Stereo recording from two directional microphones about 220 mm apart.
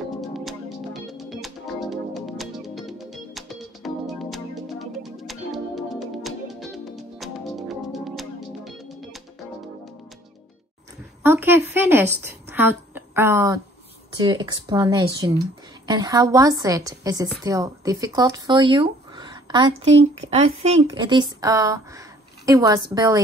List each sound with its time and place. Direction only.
0.2 s music: centre (ahead or behind)
11.2 s a woman's voice: 10° right (ahead or behind)